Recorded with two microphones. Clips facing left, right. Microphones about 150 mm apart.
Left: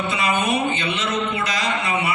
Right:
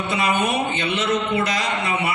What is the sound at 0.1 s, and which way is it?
A man's voice, 55° right (ahead or behind).